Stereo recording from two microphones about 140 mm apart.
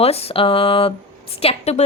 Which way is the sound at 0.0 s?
45° left (ahead or behind).